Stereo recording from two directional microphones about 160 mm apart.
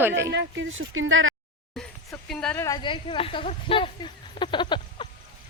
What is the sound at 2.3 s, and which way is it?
Speech, 5° left (ahead or behind).